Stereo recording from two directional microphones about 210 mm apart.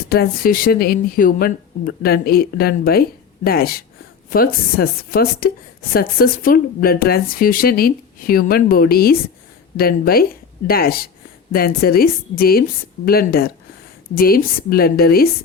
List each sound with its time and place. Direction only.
0.1 s speech: 45° left (ahead or behind)